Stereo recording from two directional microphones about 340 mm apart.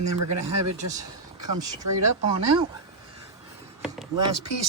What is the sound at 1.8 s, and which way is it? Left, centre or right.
Speech, right.